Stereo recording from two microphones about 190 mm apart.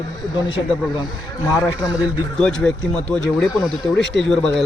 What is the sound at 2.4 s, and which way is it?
Speech, 5° left (ahead or behind).